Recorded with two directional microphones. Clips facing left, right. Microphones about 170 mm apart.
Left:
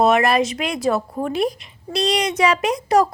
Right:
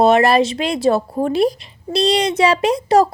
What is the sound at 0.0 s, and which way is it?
A woman's voice, 30° right (ahead or behind).